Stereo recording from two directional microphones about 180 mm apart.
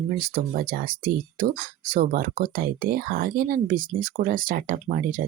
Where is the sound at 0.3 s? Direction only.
55° right (ahead or behind).